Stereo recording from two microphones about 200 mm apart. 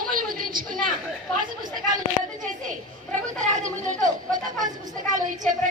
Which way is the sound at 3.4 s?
35° right (ahead or behind).